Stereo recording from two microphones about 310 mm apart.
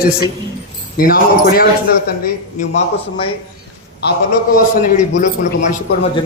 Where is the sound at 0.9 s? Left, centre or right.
Left.